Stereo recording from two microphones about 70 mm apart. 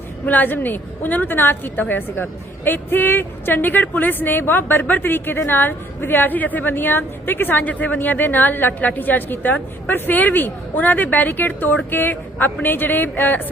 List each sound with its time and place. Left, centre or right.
0.3 s a woman's voice: left